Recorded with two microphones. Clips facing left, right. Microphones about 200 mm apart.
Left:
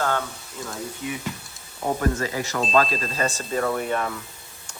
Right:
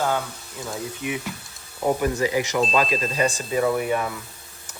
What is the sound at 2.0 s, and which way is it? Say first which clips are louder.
Speech: right 3 dB; 15° right (ahead or behind).